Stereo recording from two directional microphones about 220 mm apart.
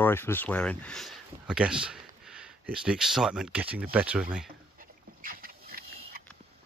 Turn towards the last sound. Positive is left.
turn(degrees=-40)  # may be behind; listen again after turning